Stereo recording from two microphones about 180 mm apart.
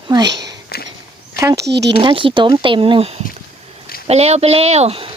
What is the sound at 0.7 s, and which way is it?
Walk, 60° left (ahead or behind).